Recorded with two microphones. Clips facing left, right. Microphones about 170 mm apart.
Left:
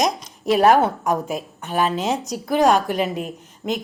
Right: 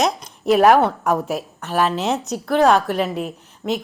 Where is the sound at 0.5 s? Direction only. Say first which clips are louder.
Right 2 dB; centre (ahead or behind).